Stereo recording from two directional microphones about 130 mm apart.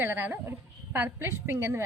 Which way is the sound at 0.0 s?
15° right (ahead or behind).